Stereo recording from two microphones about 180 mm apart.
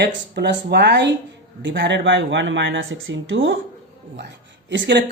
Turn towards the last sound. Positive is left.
turn(degrees=-75)  # may be behind; listen again after turning